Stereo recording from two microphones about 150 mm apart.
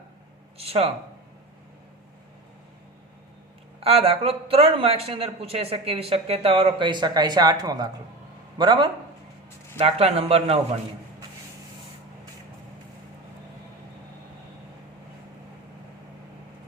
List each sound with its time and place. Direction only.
0.6 s a man's voice: 40° right (ahead or behind)
3.8 s a man's voice: 40° right (ahead or behind)
9.7 s a man's voice: 45° right (ahead or behind)